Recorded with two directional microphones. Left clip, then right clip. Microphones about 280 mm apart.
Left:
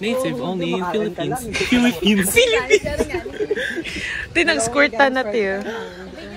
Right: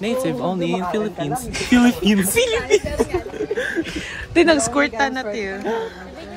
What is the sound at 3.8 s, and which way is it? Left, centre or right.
Speech, centre.